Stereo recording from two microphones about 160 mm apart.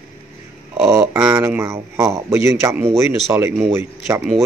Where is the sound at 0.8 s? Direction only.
15° right (ahead or behind).